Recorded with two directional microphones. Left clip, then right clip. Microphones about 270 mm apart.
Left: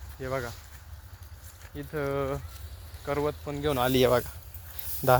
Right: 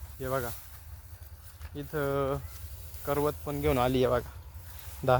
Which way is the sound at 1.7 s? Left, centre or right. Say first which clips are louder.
Even; centre.